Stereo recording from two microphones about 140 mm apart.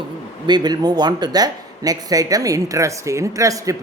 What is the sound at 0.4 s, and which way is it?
A man's voice, 30° right (ahead or behind).